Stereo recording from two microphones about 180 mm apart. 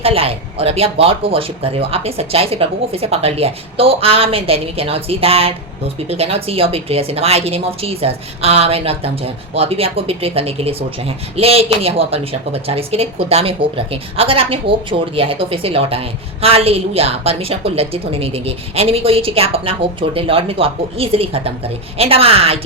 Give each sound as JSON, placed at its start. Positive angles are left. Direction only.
{"t": 0.0, "sound": "speech", "side_deg": -30}